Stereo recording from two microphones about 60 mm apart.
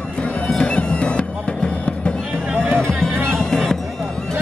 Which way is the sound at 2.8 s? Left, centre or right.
Centre.